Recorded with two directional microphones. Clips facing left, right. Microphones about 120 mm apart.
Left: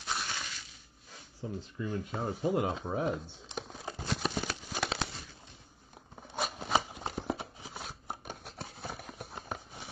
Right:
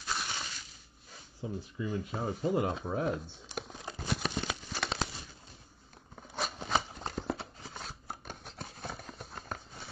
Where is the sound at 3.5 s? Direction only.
Centre (ahead or behind).